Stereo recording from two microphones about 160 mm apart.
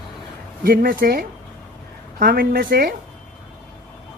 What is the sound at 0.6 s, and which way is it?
A woman's voice, 65° right (ahead or behind).